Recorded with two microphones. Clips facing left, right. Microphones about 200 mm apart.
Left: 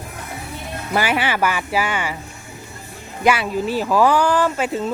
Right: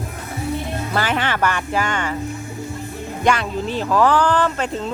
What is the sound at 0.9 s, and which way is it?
Speech, 10° left (ahead or behind).